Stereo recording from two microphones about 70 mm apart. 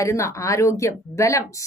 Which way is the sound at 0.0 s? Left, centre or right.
Left.